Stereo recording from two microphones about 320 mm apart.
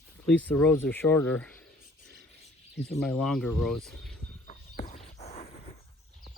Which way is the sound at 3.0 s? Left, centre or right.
Centre.